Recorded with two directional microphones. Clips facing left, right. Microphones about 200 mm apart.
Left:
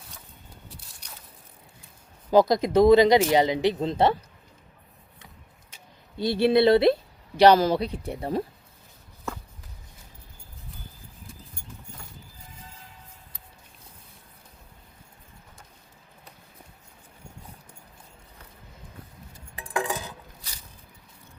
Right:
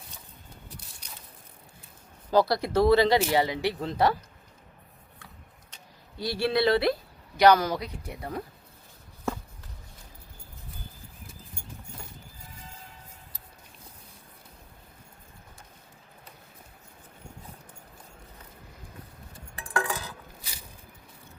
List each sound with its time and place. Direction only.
2.3 s speech: 20° left (ahead or behind)
6.1 s speech: 20° left (ahead or behind)
19.7 s dishes: 20° left (ahead or behind)